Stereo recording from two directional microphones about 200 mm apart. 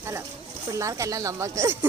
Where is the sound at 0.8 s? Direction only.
15° right (ahead or behind).